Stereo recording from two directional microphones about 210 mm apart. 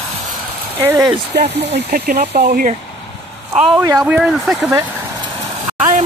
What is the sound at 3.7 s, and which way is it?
Speech, 15° right (ahead or behind).